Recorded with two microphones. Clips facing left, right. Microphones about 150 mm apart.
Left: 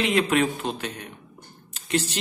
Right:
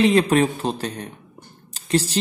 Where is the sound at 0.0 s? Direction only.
35° right (ahead or behind).